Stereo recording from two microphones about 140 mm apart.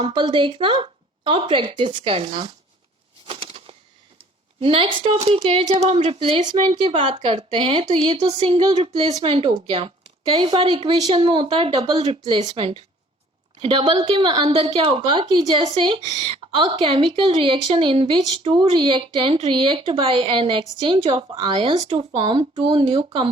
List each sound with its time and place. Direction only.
0.0 s a woman's voice: 35° right (ahead or behind)
3.2 s a sound: 40° right (ahead or behind)
4.6 s a woman's voice: 40° right (ahead or behind)
8.3 s a woman's voice: 45° right (ahead or behind)